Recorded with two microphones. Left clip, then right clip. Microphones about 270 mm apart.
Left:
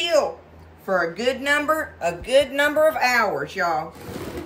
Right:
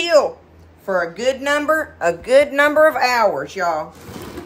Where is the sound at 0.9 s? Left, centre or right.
Centre.